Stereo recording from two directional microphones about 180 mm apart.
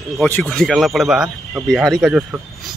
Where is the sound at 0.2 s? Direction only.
5° left (ahead or behind).